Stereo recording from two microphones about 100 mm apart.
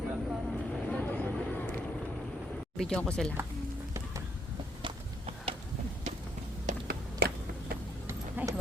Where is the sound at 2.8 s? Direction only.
5° left (ahead or behind).